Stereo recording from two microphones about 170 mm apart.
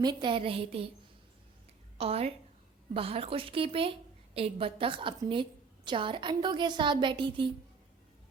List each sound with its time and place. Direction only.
0.0 s a woman's voice: 25° right (ahead or behind)
2.0 s a woman's voice: 35° right (ahead or behind)